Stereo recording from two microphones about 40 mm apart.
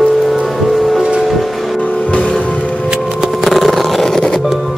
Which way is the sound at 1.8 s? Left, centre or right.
Left.